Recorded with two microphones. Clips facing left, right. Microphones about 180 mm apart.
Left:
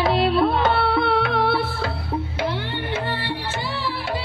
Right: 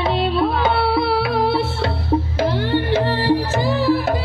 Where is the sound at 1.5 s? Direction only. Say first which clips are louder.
Right 3 dB; 30° right (ahead or behind).